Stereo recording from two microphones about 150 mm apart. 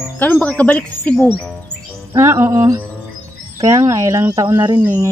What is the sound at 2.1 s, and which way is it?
A man's voice, 15° right (ahead or behind).